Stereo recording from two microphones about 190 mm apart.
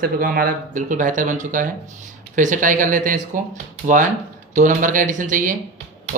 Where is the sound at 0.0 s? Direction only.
50° right (ahead or behind).